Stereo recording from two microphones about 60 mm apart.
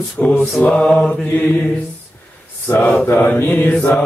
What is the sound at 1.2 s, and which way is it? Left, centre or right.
Speech, left.